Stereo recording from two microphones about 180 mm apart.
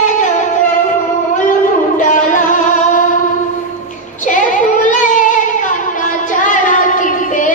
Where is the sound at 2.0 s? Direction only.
45° left (ahead or behind).